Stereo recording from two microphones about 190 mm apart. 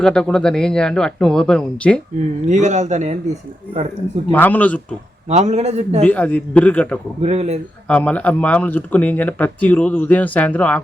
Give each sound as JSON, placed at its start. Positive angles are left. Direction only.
{"t": 0.0, "sound": "speech", "side_deg": 5}
{"t": 2.5, "sound": "a man's voice", "side_deg": -40}
{"t": 4.3, "sound": "speech", "side_deg": 10}
{"t": 5.3, "sound": "a man's voice", "side_deg": -35}
{"t": 6.1, "sound": "speech", "side_deg": 10}
{"t": 7.2, "sound": "a man's voice", "side_deg": -35}
{"t": 7.9, "sound": "speech", "side_deg": 5}